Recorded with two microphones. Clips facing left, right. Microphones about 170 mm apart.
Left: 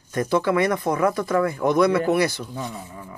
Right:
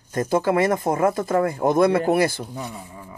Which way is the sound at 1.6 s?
50° right (ahead or behind).